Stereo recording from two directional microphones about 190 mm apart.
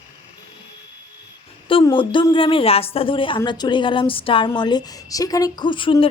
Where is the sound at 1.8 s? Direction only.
25° left (ahead or behind).